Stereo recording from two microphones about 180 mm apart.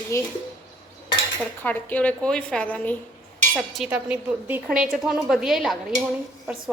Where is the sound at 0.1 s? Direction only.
15° left (ahead or behind).